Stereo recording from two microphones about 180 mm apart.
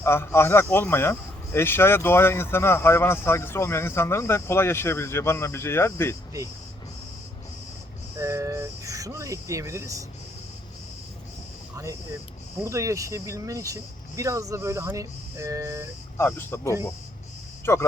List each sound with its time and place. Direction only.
0.0 s speech: 15° left (ahead or behind)
8.2 s speech: 15° right (ahead or behind)
12.6 s speech: 15° right (ahead or behind)
16.1 s speech: 15° left (ahead or behind)